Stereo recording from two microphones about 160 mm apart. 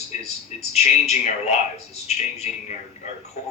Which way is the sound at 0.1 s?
45° left (ahead or behind).